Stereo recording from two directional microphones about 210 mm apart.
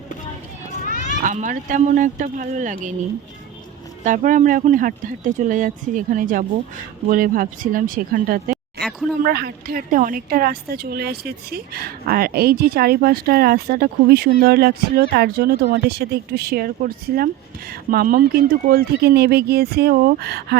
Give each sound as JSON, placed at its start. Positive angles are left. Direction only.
{"t": 0.9, "sound": "a sound", "side_deg": 40}
{"t": 1.2, "sound": "speech", "side_deg": -35}
{"t": 4.0, "sound": "a woman's voice", "side_deg": -40}